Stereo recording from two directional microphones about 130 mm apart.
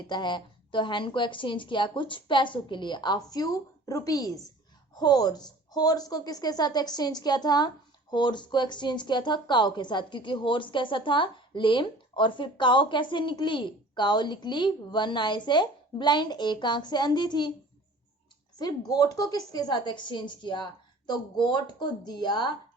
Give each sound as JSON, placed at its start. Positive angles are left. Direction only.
{"t": 0.1, "sound": "a woman's voice", "side_deg": 35}
{"t": 18.6, "sound": "a woman's voice", "side_deg": 30}